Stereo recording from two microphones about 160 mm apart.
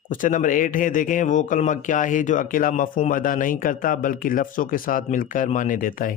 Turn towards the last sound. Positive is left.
turn(degrees=60)  # may be behind; listen again after turning